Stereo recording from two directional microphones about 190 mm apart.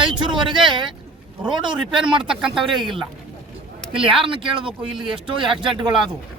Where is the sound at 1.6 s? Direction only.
5° right (ahead or behind).